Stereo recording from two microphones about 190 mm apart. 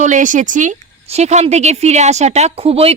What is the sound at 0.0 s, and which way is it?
A woman's voice, 40° right (ahead or behind).